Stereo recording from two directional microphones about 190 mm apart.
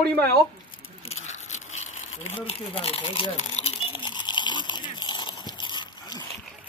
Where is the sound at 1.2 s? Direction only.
40° left (ahead or behind); by 6.2 s 20° left (ahead or behind).